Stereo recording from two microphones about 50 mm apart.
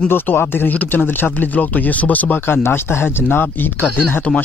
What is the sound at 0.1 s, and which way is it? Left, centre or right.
Speech, left.